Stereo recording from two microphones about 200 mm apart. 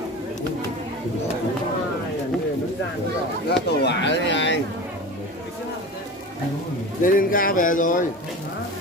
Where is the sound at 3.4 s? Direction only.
60° left (ahead or behind).